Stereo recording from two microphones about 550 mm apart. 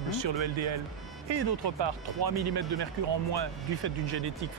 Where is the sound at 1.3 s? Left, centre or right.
Right.